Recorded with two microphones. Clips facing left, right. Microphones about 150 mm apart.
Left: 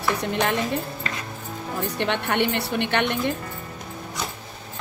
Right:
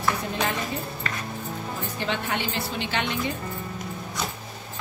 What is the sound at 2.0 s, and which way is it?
A woman's voice, 60° left (ahead or behind).